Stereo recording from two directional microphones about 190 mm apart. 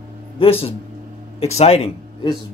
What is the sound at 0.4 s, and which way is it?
Speech, 30° left (ahead or behind).